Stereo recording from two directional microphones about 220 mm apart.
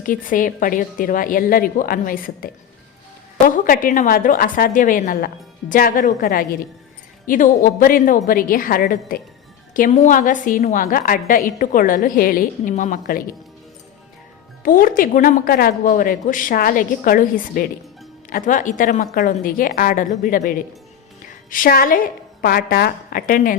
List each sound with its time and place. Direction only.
0.0 s a woman's voice: 40° left (ahead or behind)
14.6 s a woman's voice: 40° left (ahead or behind)